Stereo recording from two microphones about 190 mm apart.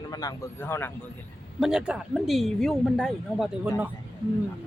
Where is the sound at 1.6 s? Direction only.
5° right (ahead or behind).